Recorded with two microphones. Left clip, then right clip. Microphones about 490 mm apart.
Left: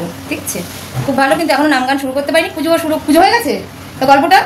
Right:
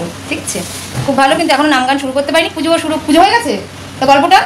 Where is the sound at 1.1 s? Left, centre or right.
Left.